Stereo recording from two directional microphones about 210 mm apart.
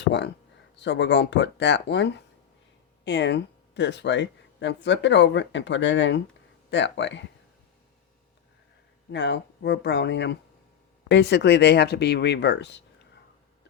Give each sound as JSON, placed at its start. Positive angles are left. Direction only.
{"t": 0.0, "sound": "speech", "side_deg": 55}
{"t": 9.1, "sound": "speech", "side_deg": 55}